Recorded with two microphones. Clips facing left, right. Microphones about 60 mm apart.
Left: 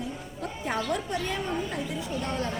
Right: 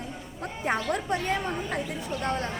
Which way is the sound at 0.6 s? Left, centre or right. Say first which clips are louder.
Right 3 dB; right.